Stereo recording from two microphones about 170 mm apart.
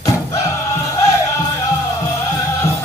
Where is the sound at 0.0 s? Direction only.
20° left (ahead or behind).